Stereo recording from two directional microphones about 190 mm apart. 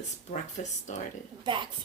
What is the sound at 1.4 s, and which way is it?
Speech, 25° right (ahead or behind).